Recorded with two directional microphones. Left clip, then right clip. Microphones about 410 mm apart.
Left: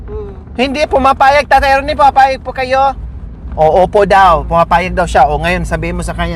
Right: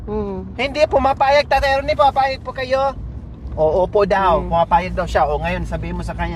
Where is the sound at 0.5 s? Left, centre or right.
Left.